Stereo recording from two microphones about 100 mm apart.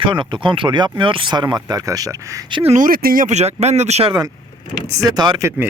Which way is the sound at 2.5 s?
55° right (ahead or behind).